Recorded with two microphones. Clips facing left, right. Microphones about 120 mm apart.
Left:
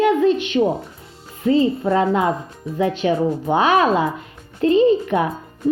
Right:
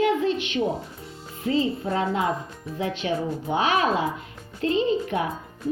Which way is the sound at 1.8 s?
60° left (ahead or behind).